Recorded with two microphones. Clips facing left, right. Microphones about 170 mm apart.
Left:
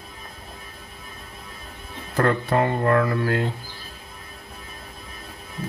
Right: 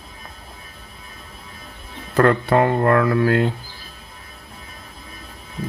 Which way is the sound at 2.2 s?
65° right (ahead or behind).